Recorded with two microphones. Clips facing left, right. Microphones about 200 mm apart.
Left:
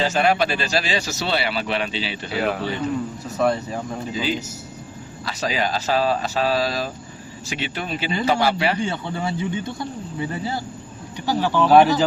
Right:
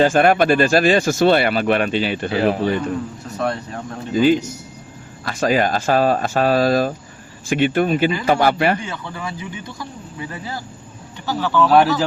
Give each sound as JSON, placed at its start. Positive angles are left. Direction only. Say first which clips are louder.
{"t": 0.0, "sound": "speech", "louder": "right 6 dB", "side_deg": -50}
{"t": 3.2, "sound": "speech", "louder": "left 4 dB", "side_deg": 0}
{"t": 4.1, "sound": "speech", "louder": "right 13 dB", "side_deg": -50}
{"t": 8.8, "sound": "speech", "louder": "left 4 dB", "side_deg": 30}
{"t": 11.3, "sound": "speech", "louder": "right 1 dB", "side_deg": 15}
{"t": 11.7, "sound": "speech", "louder": "left 2 dB", "side_deg": 0}